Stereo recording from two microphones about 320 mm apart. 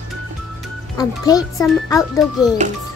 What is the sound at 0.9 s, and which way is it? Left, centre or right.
A child's voice, centre.